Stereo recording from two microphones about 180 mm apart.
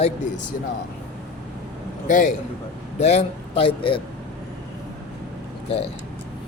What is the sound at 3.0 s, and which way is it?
A man's voice, 35° left (ahead or behind).